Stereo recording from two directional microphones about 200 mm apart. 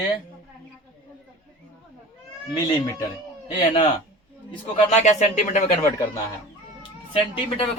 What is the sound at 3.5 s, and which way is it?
A man's voice, 25° left (ahead or behind).